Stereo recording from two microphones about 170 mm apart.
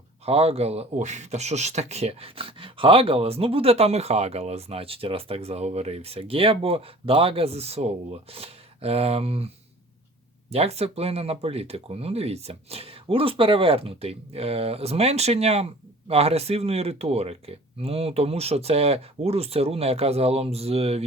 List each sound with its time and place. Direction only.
0.3 s speech: 35° right (ahead or behind)
10.5 s speech: 35° right (ahead or behind)